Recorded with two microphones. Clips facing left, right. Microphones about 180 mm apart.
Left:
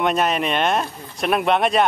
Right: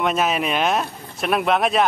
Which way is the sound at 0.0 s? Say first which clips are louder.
Left 1 dB; centre (ahead or behind).